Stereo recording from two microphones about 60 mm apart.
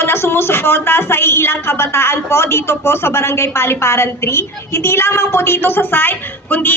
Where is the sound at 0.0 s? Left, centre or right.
Left.